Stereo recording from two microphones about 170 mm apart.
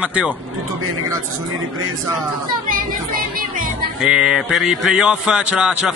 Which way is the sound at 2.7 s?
55° right (ahead or behind).